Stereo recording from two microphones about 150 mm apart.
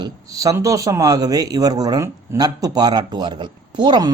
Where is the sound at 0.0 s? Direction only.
25° right (ahead or behind).